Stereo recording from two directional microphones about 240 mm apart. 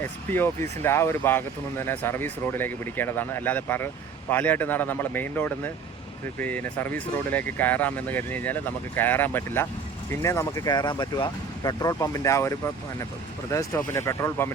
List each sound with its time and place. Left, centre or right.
0.3 s speech: centre